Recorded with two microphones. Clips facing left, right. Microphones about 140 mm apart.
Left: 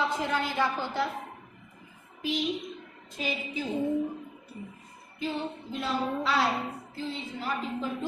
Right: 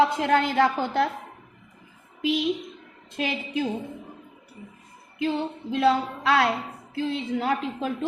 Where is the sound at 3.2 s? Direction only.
65° right (ahead or behind).